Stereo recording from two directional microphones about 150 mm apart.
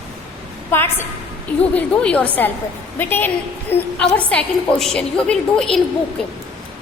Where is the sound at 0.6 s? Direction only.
15° left (ahead or behind).